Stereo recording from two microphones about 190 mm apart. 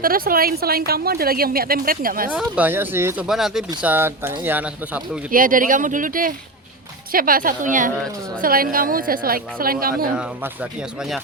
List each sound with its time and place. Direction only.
0.0 s a woman's voice: 50° right (ahead or behind)
2.3 s speech: 5° right (ahead or behind)
5.3 s a woman's voice: 45° right (ahead or behind)
10.2 s speech: 5° right (ahead or behind)